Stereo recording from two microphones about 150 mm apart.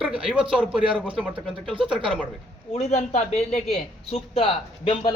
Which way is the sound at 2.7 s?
45° left (ahead or behind).